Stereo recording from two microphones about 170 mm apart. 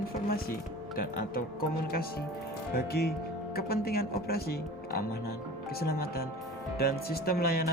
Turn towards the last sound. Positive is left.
turn(degrees=65)  # may be behind; listen again after turning